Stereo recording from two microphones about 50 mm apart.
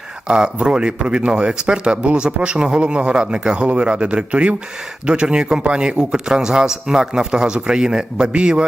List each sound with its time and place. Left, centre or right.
0.3 s a man's voice: centre